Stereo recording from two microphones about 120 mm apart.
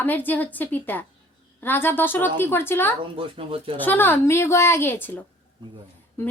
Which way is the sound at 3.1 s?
50° right (ahead or behind).